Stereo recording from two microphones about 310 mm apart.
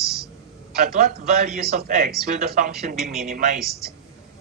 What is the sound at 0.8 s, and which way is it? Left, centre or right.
A man's voice, right.